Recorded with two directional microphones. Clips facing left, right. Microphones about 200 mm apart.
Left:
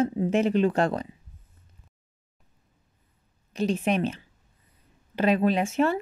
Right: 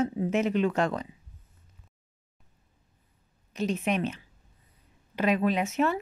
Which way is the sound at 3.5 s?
30° left (ahead or behind).